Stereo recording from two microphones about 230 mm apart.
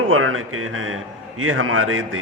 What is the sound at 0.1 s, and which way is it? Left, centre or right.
A man's voice, right.